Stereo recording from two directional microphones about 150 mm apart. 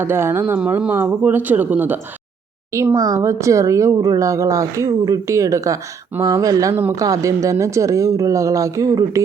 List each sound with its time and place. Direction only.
0.0 s speech: 15° right (ahead or behind)